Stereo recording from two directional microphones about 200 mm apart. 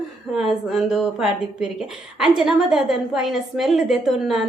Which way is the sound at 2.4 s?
Centre (ahead or behind).